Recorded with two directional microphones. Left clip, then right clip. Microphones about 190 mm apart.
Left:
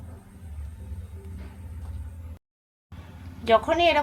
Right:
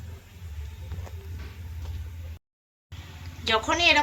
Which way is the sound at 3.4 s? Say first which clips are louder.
Left 3 dB; 50° left (ahead or behind).